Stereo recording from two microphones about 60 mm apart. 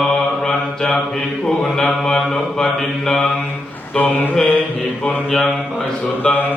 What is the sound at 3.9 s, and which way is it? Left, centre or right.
Mantra, left.